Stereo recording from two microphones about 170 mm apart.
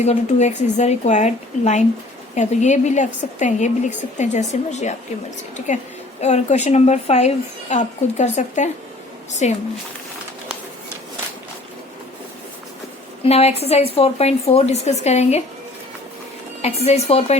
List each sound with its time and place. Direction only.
0.0 s a woman's voice: 40° left (ahead or behind)
13.2 s a woman's voice: 40° left (ahead or behind)
16.6 s a woman's voice: 40° left (ahead or behind)